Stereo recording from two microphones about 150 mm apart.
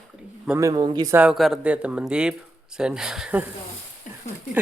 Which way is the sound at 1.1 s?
5° right (ahead or behind).